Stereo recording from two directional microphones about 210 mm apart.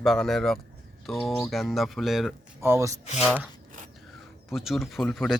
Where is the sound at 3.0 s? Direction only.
30° left (ahead or behind).